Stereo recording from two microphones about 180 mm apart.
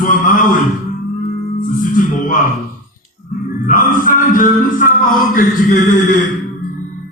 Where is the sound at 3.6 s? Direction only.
45° left (ahead or behind).